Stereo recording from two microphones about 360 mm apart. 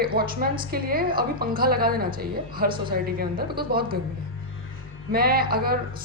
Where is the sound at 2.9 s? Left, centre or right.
Right.